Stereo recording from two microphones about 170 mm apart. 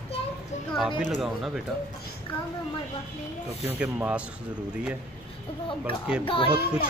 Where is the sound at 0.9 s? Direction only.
Centre (ahead or behind).